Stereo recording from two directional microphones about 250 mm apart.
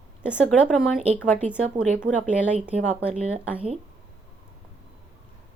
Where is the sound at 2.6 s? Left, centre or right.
Centre.